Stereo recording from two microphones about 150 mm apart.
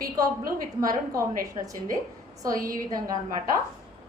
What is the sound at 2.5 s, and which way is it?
Speech, 65° right (ahead or behind).